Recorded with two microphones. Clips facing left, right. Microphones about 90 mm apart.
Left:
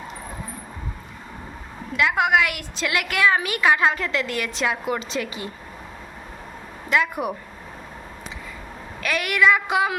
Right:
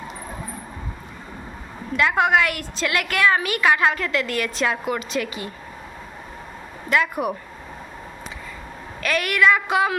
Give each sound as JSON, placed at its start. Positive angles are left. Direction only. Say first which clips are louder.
{"t": 2.0, "sound": "a woman's voice", "louder": "right 1 dB", "side_deg": 5}
{"t": 6.9, "sound": "a woman's voice", "louder": "right 1 dB", "side_deg": 20}
{"t": 9.0, "sound": "a woman's voice", "louder": "right 1 dB", "side_deg": 15}